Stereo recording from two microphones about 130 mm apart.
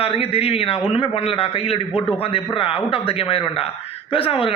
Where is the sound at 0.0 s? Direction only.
45° left (ahead or behind).